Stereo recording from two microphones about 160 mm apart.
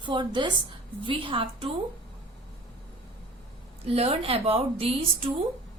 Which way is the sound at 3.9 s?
35° right (ahead or behind).